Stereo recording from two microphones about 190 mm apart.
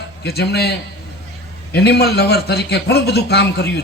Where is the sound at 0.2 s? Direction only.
60° left (ahead or behind).